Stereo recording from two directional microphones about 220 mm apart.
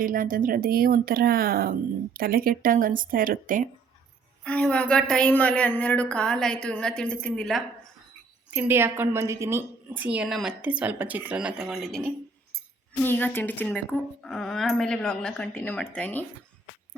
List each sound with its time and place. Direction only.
0.0 s speech: 40° right (ahead or behind)
4.4 s speech: 5° left (ahead or behind)
8.4 s a woman's voice: 10° right (ahead or behind)
13.1 s speech: 10° left (ahead or behind)